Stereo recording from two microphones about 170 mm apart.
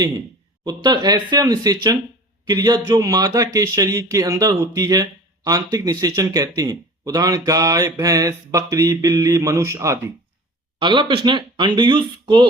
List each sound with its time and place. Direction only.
0.6 s speech: 25° right (ahead or behind)
10.8 s speech: 30° right (ahead or behind)